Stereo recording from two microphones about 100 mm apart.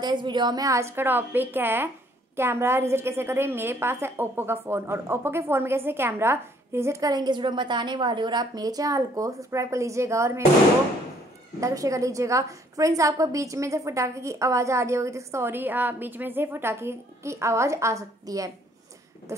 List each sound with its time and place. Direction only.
0.0 s a woman's voice: 50° right (ahead or behind); by 10.4 s 30° right (ahead or behind)
11.6 s a woman's voice: 35° right (ahead or behind)